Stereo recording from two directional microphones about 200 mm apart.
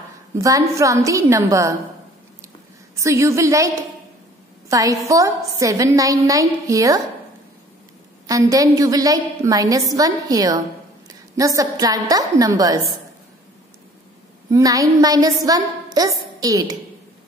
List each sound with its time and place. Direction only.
0.4 s a woman's voice: 15° right (ahead or behind)
3.0 s a woman's voice: 15° right (ahead or behind)
8.3 s a woman's voice: 15° right (ahead or behind)
14.5 s a woman's voice: 15° right (ahead or behind)